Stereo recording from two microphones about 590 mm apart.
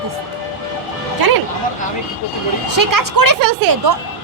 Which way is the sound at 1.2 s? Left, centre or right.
Right.